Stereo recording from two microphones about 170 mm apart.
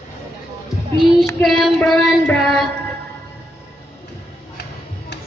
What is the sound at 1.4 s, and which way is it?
Child singing, centre (ahead or behind).